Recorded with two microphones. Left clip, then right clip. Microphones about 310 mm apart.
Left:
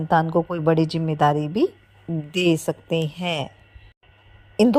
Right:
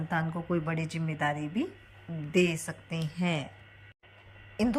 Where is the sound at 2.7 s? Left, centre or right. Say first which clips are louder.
Left 15 dB; left.